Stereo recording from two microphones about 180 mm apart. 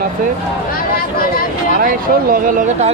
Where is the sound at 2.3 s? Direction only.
50° right (ahead or behind).